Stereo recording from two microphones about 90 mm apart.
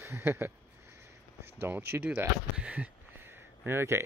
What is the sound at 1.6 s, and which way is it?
Speech, 25° right (ahead or behind).